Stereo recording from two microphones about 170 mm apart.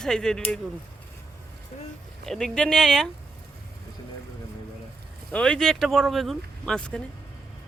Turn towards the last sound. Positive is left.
turn(degrees=5)  # may be behind; listen again after turning